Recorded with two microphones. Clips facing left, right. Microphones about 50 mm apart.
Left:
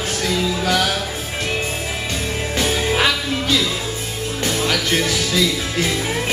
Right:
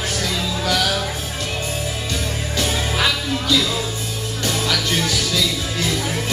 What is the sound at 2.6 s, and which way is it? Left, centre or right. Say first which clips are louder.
Music: left 3 dB; left.